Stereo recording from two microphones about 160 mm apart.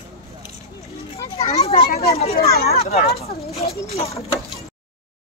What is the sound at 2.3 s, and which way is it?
Speech, 75° left (ahead or behind).